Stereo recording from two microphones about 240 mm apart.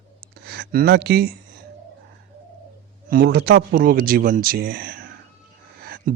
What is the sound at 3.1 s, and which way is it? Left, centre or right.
A man's voice, right.